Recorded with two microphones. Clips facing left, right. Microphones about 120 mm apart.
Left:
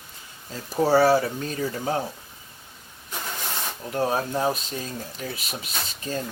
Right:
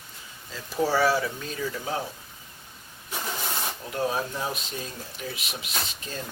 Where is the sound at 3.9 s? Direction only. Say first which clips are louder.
Left 4 dB; 40° left (ahead or behind).